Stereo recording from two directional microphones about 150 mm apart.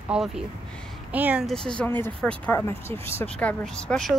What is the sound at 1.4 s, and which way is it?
Speech, 5° left (ahead or behind).